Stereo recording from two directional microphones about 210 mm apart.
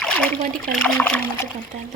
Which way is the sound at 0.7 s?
5° left (ahead or behind).